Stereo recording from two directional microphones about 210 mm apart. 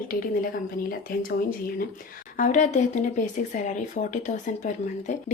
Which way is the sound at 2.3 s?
40° left (ahead or behind).